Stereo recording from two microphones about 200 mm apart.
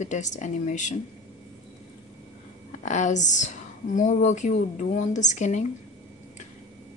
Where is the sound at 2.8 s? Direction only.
35° left (ahead or behind).